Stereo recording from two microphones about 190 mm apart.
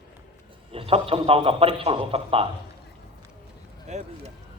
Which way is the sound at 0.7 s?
30° right (ahead or behind).